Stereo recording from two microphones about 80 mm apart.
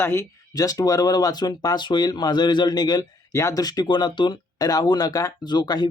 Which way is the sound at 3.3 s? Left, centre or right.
Left.